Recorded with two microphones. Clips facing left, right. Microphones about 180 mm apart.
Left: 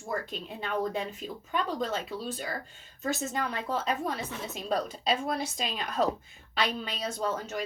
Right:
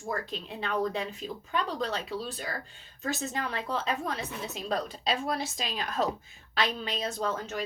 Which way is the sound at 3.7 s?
Centre (ahead or behind).